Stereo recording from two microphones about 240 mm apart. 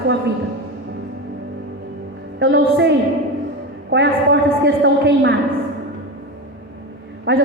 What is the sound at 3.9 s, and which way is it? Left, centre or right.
A woman's voice, right.